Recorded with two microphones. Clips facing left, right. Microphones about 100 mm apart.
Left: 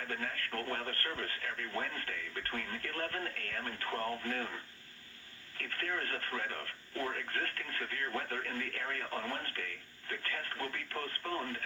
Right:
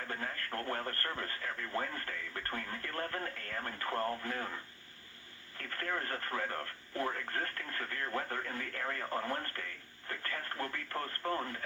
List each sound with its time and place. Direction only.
0.1 s speech: 30° right (ahead or behind)
6.0 s speech: 30° right (ahead or behind)